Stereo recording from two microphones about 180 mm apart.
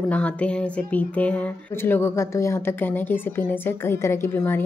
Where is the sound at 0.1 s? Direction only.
5° left (ahead or behind).